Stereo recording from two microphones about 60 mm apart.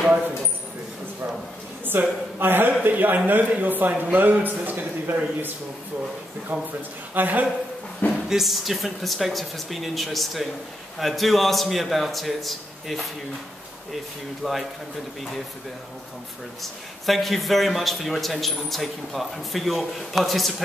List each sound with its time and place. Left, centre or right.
1.9 s a man's voice: right
6.5 s speech: right
8.3 s a man's voice: centre
14.4 s a man's voice: centre
16.6 s a man's voice: centre